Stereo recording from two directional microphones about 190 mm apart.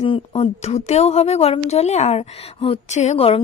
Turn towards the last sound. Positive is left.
turn(degrees=35)  # may be behind; listen again after turning